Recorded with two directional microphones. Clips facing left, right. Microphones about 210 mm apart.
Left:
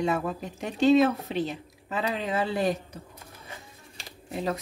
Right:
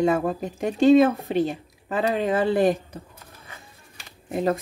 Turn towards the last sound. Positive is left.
turn(degrees=-50)  # may be behind; listen again after turning